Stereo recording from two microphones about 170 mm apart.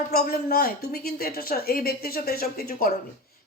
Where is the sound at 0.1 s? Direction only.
65° left (ahead or behind).